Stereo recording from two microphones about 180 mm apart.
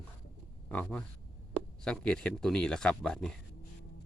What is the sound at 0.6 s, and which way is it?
Speech, 5° left (ahead or behind).